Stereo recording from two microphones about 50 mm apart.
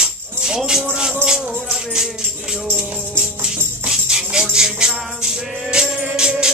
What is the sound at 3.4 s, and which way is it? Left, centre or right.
Music, centre.